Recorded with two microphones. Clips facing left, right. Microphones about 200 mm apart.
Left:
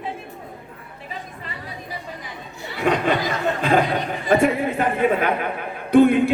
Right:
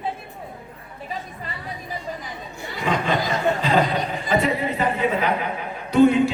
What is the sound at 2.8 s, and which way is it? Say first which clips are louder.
A man's voice: left 3 dB; 55° left (ahead or behind).